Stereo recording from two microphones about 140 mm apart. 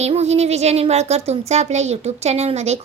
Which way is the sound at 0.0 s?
50° right (ahead or behind).